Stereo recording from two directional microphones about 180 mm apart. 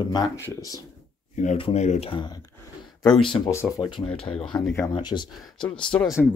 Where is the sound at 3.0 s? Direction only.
5° left (ahead or behind).